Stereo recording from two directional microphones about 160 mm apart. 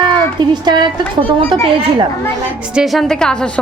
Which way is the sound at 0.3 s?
25° right (ahead or behind).